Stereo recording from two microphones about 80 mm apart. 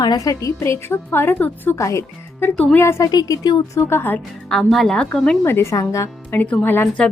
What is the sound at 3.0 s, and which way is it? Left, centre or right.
Speech, left.